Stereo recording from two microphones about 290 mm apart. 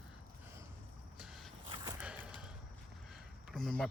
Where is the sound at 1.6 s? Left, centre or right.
Centre.